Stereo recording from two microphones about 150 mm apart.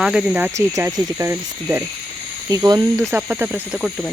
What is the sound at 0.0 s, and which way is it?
Speech, 5° right (ahead or behind).